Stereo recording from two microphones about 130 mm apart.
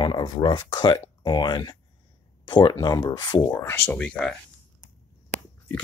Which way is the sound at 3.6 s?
20° left (ahead or behind).